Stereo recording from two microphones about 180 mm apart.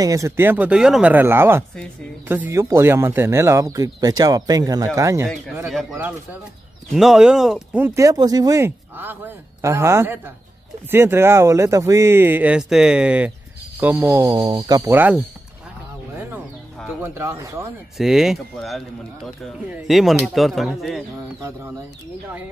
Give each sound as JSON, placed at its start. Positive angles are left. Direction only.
{"t": 0.0, "sound": "speech", "side_deg": -20}
{"t": 5.7, "sound": "speech", "side_deg": 0}
{"t": 16.2, "sound": "a sound", "side_deg": -10}
{"t": 17.0, "sound": "speech", "side_deg": -15}
{"t": 17.9, "sound": "speech", "side_deg": 0}